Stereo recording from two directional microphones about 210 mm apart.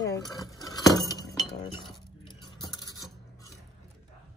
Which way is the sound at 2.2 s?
15° left (ahead or behind).